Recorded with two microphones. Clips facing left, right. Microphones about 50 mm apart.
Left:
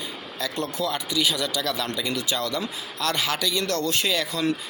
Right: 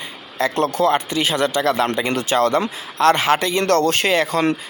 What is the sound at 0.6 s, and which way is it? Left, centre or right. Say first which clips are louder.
Speech: right 11 dB; right.